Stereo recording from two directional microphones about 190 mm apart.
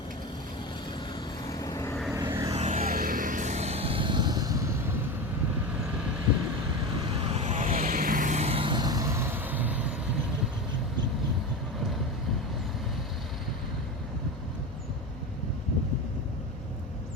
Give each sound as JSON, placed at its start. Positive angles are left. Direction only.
{"t": 1.5, "sound": "vehicle", "side_deg": 20}
{"t": 2.1, "sound": "vehicle", "side_deg": -15}
{"t": 2.6, "sound": "vehicle", "side_deg": -40}
{"t": 7.3, "sound": "vehicle", "side_deg": -35}